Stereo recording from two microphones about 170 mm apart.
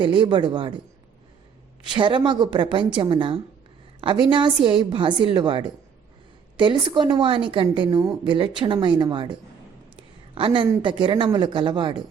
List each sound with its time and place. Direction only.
0.0 s a woman's voice: 30° right (ahead or behind)
1.8 s a woman's voice: 25° right (ahead or behind)